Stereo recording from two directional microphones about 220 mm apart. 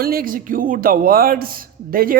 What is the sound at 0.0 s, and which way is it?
Speech, 45° right (ahead or behind).